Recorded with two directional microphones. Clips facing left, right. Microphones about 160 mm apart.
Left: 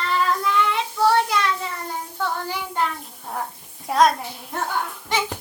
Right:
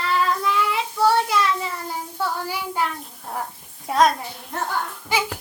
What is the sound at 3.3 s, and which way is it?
A child's voice, centre (ahead or behind).